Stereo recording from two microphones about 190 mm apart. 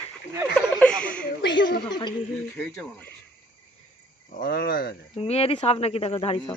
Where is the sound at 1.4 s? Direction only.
65° left (ahead or behind).